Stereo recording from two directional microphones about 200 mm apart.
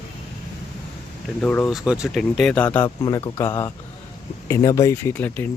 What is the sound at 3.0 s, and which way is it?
Speech, 20° left (ahead or behind).